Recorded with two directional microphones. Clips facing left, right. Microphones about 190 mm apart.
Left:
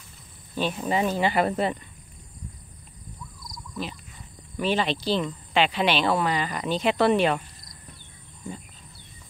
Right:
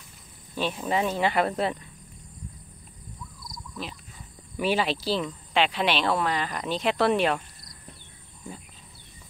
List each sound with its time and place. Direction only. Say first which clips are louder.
0.6 s speech: left 1 dB; centre (ahead or behind)
3.8 s speech: left 4 dB; centre (ahead or behind)